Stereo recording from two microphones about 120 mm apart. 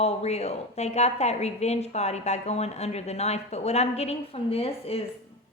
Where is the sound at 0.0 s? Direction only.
60° left (ahead or behind).